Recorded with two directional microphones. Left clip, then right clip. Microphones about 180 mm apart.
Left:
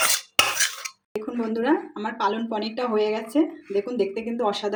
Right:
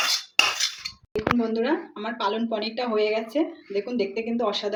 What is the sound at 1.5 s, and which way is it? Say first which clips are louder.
Speech: left 2 dB; 35° left (ahead or behind).